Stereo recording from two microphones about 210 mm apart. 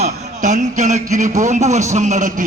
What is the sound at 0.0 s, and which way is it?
A man's voice, 35° right (ahead or behind).